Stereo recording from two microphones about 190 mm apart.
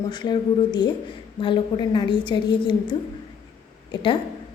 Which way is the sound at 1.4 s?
25° left (ahead or behind).